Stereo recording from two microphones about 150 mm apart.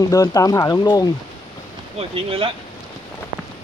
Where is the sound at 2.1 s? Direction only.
35° right (ahead or behind).